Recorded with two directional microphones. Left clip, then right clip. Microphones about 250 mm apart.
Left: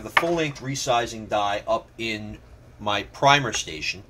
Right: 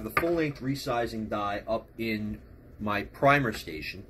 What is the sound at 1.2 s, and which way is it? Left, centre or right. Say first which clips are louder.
Speech: left 7 dB; centre.